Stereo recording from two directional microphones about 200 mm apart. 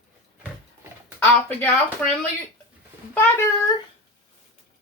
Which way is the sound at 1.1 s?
10° left (ahead or behind).